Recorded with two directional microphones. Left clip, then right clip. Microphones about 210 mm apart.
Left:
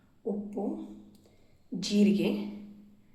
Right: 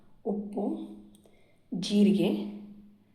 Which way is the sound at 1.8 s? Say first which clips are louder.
Right 1 dB; 20° right (ahead or behind).